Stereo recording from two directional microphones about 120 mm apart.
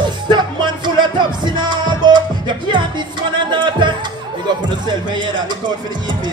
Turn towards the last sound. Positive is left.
turn(degrees=-40)  # may be behind; listen again after turning